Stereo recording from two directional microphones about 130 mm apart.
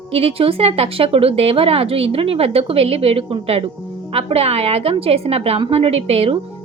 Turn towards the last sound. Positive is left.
turn(degrees=-50)  # may be behind; listen again after turning